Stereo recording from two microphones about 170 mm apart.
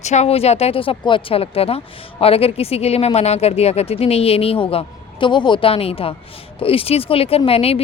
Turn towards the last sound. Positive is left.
turn(degrees=35)  # may be behind; listen again after turning